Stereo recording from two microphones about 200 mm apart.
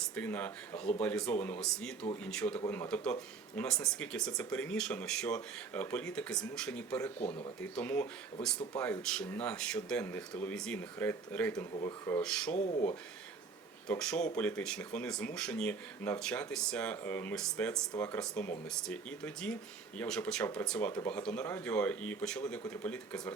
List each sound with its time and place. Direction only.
0.0 s speech: 10° left (ahead or behind)
7.2 s speech: 25° left (ahead or behind)
7.6 s speech: 10° left (ahead or behind)
11.5 s speech: 20° left (ahead or behind)
12.2 s speech: 5° left (ahead or behind)
12.5 s speech: 35° left (ahead or behind)
13.8 s speech: 5° left (ahead or behind)